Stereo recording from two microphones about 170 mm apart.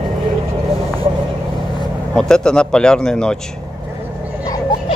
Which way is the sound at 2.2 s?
5° left (ahead or behind).